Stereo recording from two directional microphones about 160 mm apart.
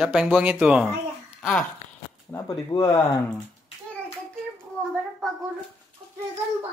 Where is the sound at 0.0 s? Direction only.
5° right (ahead or behind).